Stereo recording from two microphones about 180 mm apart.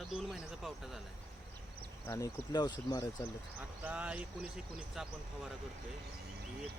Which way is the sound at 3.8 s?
5° right (ahead or behind).